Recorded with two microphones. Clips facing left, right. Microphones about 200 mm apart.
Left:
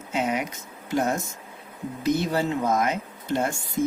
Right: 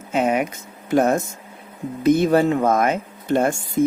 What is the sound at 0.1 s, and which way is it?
Speech, 55° right (ahead or behind).